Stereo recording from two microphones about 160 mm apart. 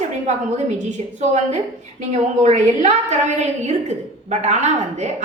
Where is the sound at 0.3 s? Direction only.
45° right (ahead or behind).